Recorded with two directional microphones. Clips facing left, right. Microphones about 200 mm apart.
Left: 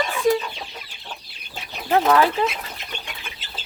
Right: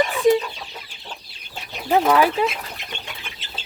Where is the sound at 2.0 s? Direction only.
10° right (ahead or behind).